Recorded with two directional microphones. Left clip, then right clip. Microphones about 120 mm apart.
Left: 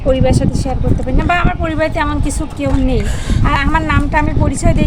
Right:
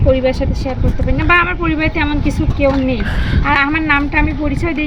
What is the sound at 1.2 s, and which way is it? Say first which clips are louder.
A woman's voice: right 3 dB; 45° left (ahead or behind).